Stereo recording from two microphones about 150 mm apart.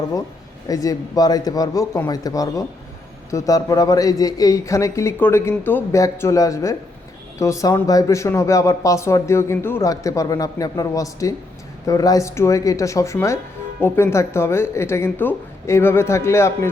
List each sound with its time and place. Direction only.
0.7 s speech: 25° left (ahead or behind)